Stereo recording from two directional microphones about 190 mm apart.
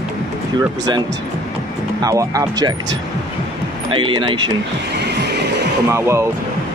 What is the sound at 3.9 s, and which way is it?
Speech, 25° right (ahead or behind).